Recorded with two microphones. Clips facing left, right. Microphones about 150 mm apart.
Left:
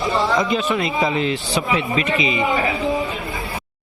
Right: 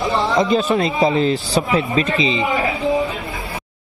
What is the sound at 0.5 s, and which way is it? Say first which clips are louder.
Speech: right 3 dB; 40° right (ahead or behind).